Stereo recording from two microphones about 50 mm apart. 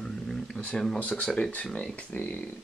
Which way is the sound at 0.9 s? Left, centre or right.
Left.